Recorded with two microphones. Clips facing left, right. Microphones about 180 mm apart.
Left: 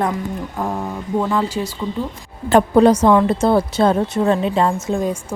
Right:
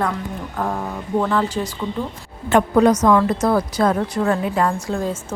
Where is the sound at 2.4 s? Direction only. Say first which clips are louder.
Left 3 dB; 30° left (ahead or behind).